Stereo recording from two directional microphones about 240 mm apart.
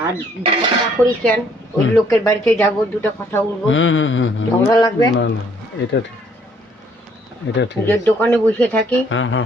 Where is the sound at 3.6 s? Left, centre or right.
Left.